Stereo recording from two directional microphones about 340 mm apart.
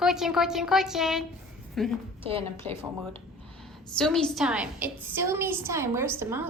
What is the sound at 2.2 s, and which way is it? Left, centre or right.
Speech, centre.